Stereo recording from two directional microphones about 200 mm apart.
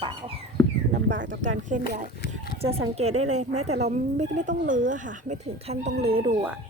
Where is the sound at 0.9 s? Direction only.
60° right (ahead or behind).